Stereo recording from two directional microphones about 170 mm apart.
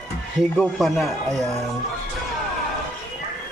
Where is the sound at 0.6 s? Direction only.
Centre (ahead or behind).